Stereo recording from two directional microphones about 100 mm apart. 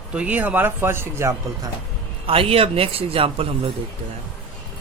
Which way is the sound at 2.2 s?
70° right (ahead or behind).